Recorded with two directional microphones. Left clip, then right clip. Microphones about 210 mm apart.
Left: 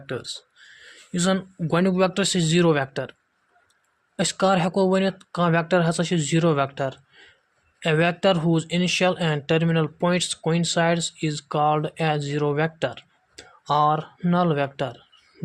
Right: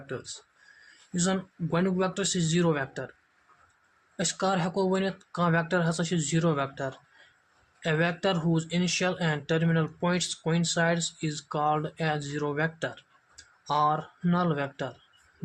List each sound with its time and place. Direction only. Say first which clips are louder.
0.1 s speech: left 7 dB; 40° left (ahead or behind)
4.2 s speech: left 7 dB; 35° left (ahead or behind)